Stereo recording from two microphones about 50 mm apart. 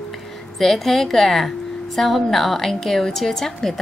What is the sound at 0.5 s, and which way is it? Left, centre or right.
A woman's voice, centre.